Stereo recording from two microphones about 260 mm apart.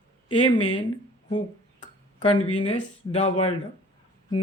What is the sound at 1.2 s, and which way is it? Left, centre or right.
Speech, left.